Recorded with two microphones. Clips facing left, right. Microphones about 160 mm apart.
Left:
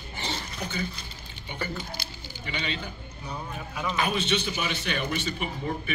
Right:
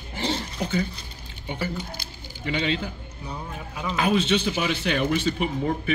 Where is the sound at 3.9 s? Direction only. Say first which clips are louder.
Right 6 dB; 90° right.